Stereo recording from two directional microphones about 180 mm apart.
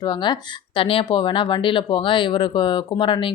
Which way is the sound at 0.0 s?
25° left (ahead or behind).